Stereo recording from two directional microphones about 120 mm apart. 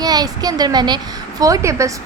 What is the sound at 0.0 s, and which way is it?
A woman's voice, 35° right (ahead or behind).